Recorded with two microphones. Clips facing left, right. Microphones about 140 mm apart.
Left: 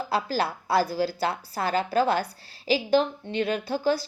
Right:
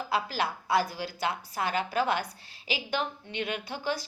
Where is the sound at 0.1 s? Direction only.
35° left (ahead or behind).